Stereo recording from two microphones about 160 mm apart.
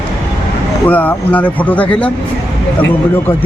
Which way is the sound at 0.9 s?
10° left (ahead or behind).